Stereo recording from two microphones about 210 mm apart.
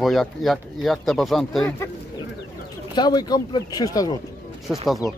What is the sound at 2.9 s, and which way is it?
Speech, 20° left (ahead or behind).